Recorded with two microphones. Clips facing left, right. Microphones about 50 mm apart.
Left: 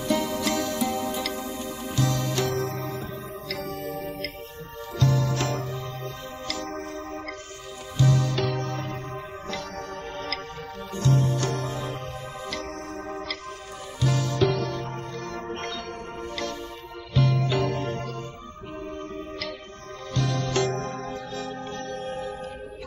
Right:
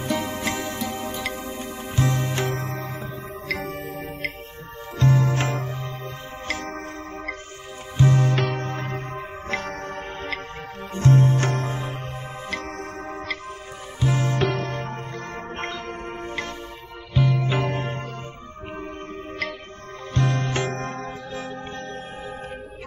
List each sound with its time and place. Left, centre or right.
0.0 s music: right
17.2 s music: centre
17.5 s music: right
20.1 s music: right